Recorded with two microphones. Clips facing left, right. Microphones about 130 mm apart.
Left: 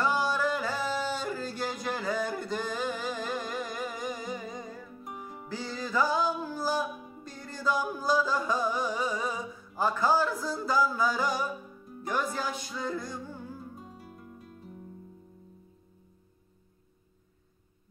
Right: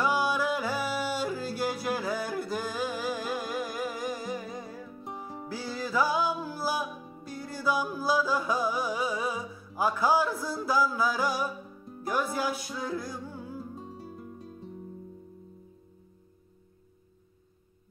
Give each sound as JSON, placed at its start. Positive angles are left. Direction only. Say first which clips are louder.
{"t": 0.0, "sound": "yodeling", "louder": "right 1 dB", "side_deg": -10}
{"t": 5.5, "sound": "music", "louder": "right 1 dB", "side_deg": -5}
{"t": 13.7, "sound": "music", "louder": "right 5 dB", "side_deg": -30}